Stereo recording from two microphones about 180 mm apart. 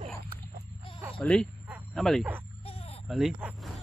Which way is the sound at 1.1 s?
5° left (ahead or behind).